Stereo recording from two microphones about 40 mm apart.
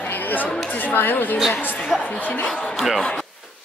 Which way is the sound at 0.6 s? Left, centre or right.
Left.